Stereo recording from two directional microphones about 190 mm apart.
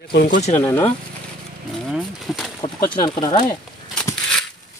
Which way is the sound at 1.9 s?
Centre (ahead or behind).